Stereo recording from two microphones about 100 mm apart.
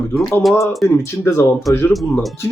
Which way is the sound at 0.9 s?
25° left (ahead or behind).